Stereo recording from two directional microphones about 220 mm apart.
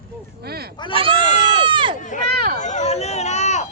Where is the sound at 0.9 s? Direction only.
25° right (ahead or behind).